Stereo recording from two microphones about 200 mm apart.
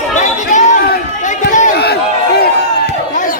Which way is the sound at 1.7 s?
55° left (ahead or behind).